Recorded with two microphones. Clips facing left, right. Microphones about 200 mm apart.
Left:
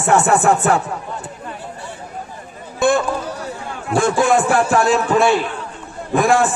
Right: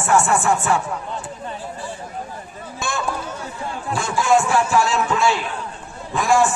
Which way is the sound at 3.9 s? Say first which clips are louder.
Left 4 dB; 55° left (ahead or behind).